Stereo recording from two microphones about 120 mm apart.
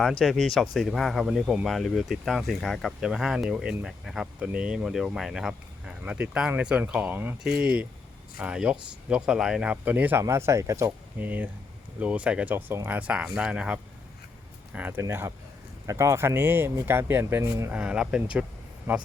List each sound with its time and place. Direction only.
0.0 s speech: 5° left (ahead or behind); by 17.7 s 25° right (ahead or behind)
17.7 s speech: 10° right (ahead or behind)